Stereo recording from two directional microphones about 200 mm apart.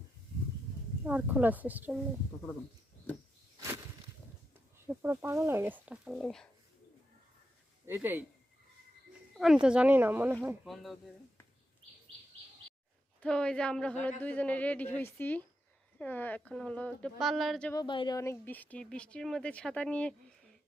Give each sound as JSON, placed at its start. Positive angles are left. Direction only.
{"t": 1.0, "sound": "speech", "side_deg": -10}
{"t": 4.9, "sound": "speech", "side_deg": -15}
{"t": 7.9, "sound": "speech", "side_deg": -10}
{"t": 9.4, "sound": "speech", "side_deg": -5}
{"t": 13.2, "sound": "a woman's voice", "side_deg": 5}
{"t": 17.7, "sound": "speech", "side_deg": 25}